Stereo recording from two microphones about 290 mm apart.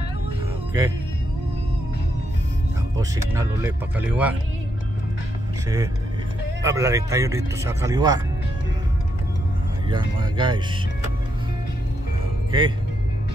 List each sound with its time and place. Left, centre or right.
3.0 s speech: centre
6.6 s speech: centre
9.8 s speech: centre
12.4 s speech: centre